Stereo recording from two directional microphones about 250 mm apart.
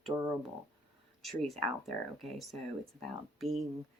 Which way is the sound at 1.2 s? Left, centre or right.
Centre.